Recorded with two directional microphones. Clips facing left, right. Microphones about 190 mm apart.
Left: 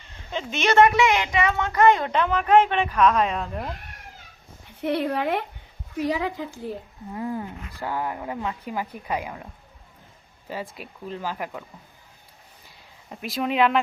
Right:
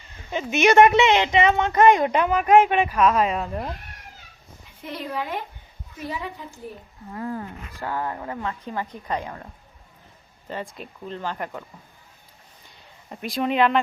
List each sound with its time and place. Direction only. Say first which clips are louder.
0.3 s a woman's voice: right 5 dB; 10° right (ahead or behind)
4.8 s speech: left 7 dB; 65° left (ahead or behind)
6.0 s a woman's voice: left 7 dB; 90° left
7.1 s speech: left 1 dB; 15° left (ahead or behind)
10.5 s speech: right 1 dB; 5° left (ahead or behind)
13.1 s speech: right 2 dB; centre (ahead or behind)